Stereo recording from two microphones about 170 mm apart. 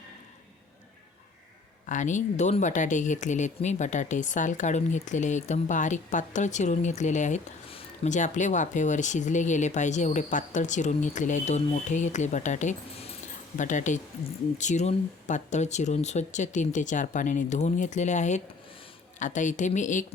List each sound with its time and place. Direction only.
1.9 s speech: 45° left (ahead or behind)